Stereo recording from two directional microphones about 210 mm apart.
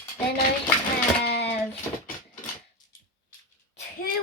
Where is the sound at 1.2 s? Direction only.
50° left (ahead or behind).